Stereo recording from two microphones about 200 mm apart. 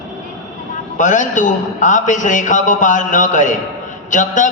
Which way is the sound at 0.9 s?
40° left (ahead or behind).